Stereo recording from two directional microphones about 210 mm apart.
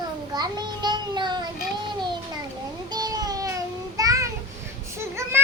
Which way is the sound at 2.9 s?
20° right (ahead or behind).